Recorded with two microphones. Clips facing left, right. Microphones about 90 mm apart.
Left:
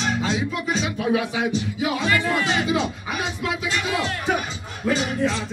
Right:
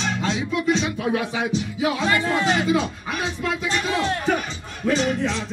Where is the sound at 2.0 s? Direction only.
25° right (ahead or behind).